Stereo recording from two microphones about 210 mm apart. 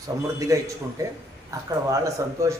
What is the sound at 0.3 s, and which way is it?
A man's voice, 15° right (ahead or behind).